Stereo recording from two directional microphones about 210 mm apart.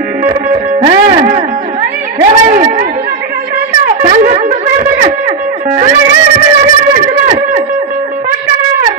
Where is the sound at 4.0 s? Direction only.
40° right (ahead or behind).